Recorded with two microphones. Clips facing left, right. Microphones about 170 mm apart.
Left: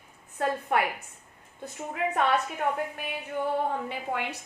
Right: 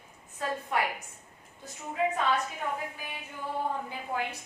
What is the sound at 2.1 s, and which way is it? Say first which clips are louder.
A woman's voice: left 3 dB; 65° left (ahead or behind).